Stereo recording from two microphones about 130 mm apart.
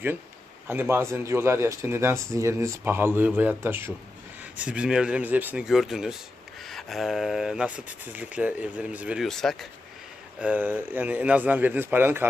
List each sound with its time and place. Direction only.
0.7 s speech: 15° right (ahead or behind)
5.6 s speech: centre (ahead or behind)
9.2 s speech: 5° left (ahead or behind)
10.4 s speech: 15° right (ahead or behind)